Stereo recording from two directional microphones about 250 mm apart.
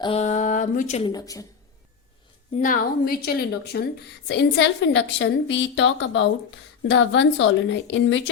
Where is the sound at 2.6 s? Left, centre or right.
Left.